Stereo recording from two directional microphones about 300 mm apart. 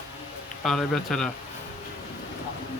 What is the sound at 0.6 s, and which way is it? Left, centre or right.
Speech, centre.